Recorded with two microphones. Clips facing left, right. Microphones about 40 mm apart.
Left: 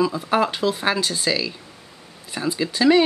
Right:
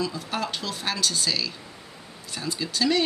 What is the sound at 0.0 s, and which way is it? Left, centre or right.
A woman's voice, left.